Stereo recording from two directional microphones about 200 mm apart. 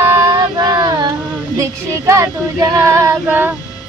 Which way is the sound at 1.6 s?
15° right (ahead or behind).